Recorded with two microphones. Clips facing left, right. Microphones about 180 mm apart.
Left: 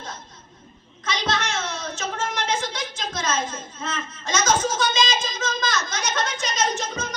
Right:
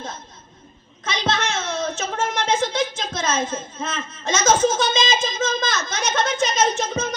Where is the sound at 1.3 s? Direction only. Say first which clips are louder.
Right 4 dB; 25° right (ahead or behind).